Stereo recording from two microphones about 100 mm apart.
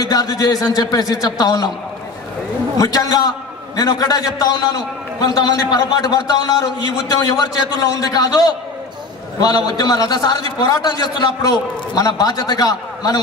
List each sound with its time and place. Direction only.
0.0 s a man's voice: 40° left (ahead or behind)
2.8 s a man's voice: 35° left (ahead or behind)
9.7 s a man's voice: 40° left (ahead or behind)